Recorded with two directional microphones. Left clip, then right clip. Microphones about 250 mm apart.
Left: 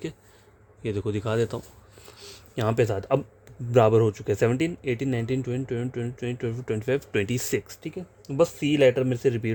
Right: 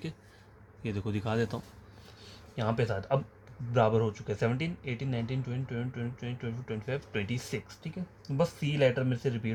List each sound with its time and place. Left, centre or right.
0.8 s speech: left
2.1 s a sound: left
3.7 s speech: left